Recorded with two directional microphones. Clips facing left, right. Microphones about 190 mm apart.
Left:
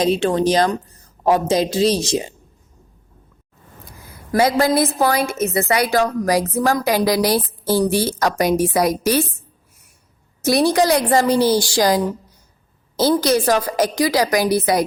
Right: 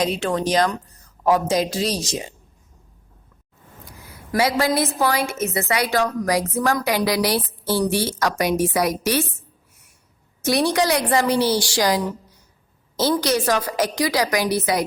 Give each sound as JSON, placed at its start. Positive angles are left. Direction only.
{"t": 0.0, "sound": "speech", "side_deg": 30}
{"t": 4.4, "sound": "a woman's voice", "side_deg": 45}
{"t": 8.2, "sound": "a woman's voice", "side_deg": 30}
{"t": 10.4, "sound": "a woman's voice", "side_deg": 35}
{"t": 13.2, "sound": "a woman's voice", "side_deg": 30}